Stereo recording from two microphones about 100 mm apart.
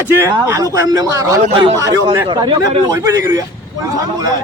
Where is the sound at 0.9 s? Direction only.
35° right (ahead or behind).